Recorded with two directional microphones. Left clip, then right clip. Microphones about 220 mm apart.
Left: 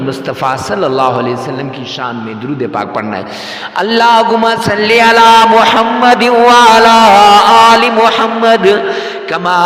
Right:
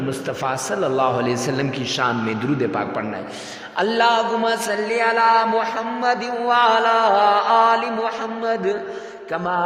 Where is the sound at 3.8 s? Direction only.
35° left (ahead or behind).